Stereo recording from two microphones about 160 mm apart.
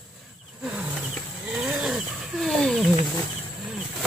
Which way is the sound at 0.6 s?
5° right (ahead or behind).